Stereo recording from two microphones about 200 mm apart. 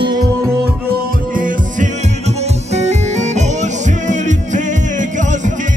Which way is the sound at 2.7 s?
35° right (ahead or behind).